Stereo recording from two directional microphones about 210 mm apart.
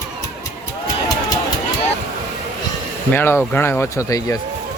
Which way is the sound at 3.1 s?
10° left (ahead or behind).